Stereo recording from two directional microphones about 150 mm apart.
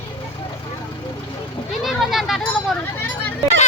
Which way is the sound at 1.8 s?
Centre (ahead or behind).